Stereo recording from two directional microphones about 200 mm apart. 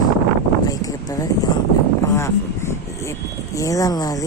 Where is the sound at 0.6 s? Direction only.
15° left (ahead or behind).